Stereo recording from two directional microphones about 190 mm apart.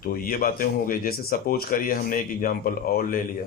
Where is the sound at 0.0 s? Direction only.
50° left (ahead or behind).